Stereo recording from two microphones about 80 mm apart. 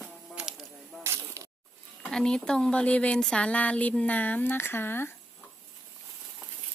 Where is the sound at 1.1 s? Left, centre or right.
Right.